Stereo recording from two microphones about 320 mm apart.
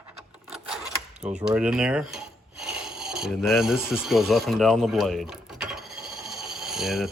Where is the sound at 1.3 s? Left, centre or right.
Centre.